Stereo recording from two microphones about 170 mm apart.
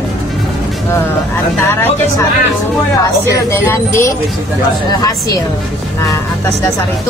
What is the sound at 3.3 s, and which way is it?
Speech, 15° left (ahead or behind).